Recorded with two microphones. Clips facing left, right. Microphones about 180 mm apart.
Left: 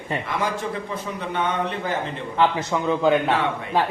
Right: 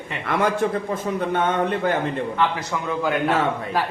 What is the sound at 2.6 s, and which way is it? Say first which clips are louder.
Speech: left 3 dB; 20° left (ahead or behind).